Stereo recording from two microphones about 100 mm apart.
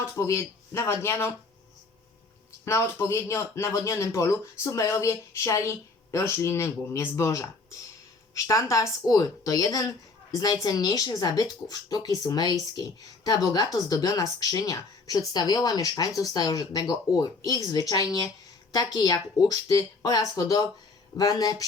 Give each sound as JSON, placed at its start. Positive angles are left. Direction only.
{"t": 0.0, "sound": "speech", "side_deg": 30}
{"t": 2.6, "sound": "speech", "side_deg": 25}